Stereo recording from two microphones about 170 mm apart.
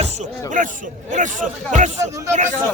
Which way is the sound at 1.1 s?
45° right (ahead or behind).